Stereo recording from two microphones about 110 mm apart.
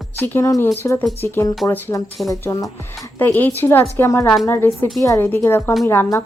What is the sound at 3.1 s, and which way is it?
Speech, 15° left (ahead or behind).